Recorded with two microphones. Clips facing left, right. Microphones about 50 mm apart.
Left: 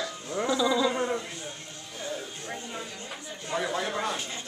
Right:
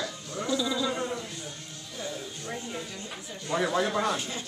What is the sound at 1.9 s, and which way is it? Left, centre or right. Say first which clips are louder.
Music: left 1 dB; left.